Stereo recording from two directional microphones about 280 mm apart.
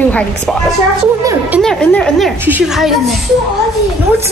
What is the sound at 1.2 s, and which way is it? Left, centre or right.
Speech, centre.